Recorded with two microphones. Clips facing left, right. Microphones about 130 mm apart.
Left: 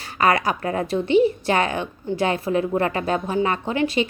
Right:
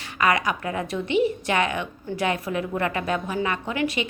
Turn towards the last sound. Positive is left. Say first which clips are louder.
# left 4 dB
turn(degrees=30)  # may be behind; listen again after turning